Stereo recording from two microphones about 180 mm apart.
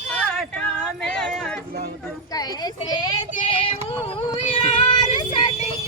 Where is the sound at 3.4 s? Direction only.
30° left (ahead or behind).